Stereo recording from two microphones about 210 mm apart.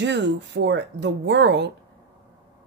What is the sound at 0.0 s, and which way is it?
Speech, 55° right (ahead or behind).